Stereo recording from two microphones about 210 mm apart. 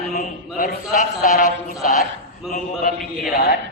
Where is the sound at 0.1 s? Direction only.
45° left (ahead or behind).